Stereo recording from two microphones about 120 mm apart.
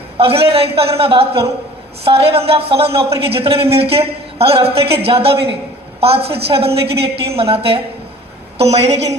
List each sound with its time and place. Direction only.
0.2 s a woman's voice: 55° right (ahead or behind)